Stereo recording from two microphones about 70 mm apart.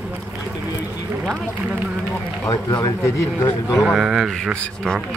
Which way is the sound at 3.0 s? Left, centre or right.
Left.